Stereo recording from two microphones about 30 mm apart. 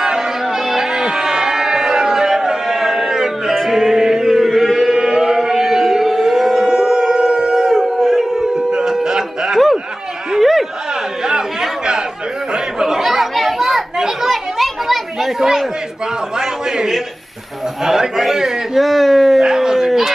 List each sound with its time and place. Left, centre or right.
0.0 s music: right
0.8 s a sound: right
3.6 s music: centre
4.5 s chant: centre; by 5.5 s right
5.5 s a sound: centre
8.8 s music: centre
10.4 s a sound: centre
12.5 s chatter: centre
13.0 s chatter: centre
13.3 s children playing: centre
14.3 s children playing: centre
16.3 s a sound: centre
19.4 s dog: centre